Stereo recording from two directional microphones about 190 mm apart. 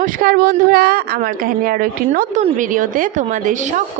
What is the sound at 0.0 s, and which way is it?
A woman's voice, 50° right (ahead or behind).